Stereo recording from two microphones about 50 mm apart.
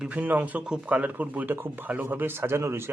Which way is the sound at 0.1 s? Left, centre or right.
Right.